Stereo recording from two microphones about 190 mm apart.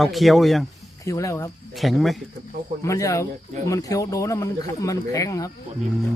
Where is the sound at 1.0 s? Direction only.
15° left (ahead or behind).